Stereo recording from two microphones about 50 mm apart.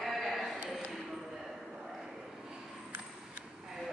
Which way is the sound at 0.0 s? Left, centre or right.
Centre.